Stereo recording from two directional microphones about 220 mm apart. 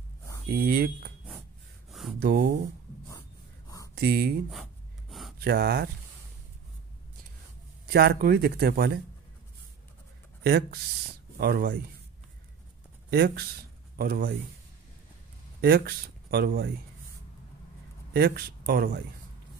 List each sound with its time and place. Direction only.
0.5 s speech: 45° right (ahead or behind)
1.9 s a sound: centre (ahead or behind)
2.1 s speech: 45° right (ahead or behind)
3.1 s a sound: 15° left (ahead or behind)
3.9 s speech: 45° right (ahead or behind)
5.4 s speech: 45° right (ahead or behind)
7.9 s speech: 45° right (ahead or behind)
10.4 s speech: 45° right (ahead or behind)
13.1 s speech: 45° right (ahead or behind)
15.6 s speech: 45° right (ahead or behind)
18.1 s speech: 45° right (ahead or behind)